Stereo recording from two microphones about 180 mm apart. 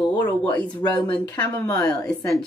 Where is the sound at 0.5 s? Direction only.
10° left (ahead or behind).